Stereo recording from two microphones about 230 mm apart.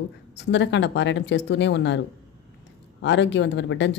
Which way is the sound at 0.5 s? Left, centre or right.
Left.